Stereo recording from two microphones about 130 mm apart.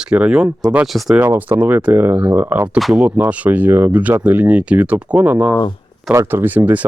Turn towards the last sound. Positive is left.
turn(degrees=-15)  # may be behind; listen again after turning